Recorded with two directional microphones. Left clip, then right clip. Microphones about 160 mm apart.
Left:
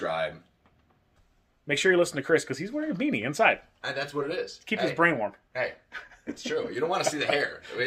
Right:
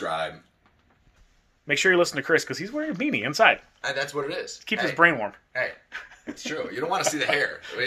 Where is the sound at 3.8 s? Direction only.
60° left (ahead or behind).